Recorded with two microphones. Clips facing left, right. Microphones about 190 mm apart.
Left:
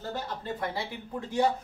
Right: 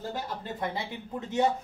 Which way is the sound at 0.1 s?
20° right (ahead or behind).